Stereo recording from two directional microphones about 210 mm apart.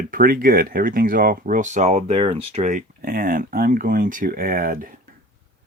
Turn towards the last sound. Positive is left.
turn(degrees=-45)  # may be behind; listen again after turning